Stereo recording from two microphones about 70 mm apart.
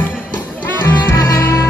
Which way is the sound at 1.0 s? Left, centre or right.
Left.